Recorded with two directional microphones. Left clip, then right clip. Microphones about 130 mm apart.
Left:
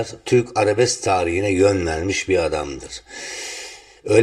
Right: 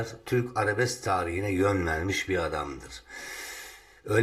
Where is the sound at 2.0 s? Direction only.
5° left (ahead or behind).